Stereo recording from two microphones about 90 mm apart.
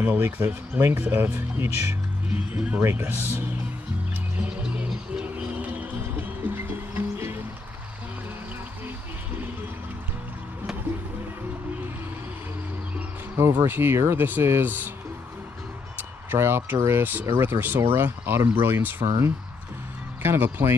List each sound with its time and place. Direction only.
0.0 s speech: 20° right (ahead or behind)
2.8 s speech: 25° right (ahead or behind)
4.4 s music: 15° right (ahead or behind)
13.7 s speech: 25° right (ahead or behind)
16.0 s speech: 25° right (ahead or behind)
20.2 s speech: 25° right (ahead or behind)